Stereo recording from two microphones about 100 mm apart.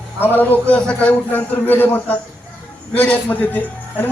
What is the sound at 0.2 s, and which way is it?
A man's voice, 20° left (ahead or behind).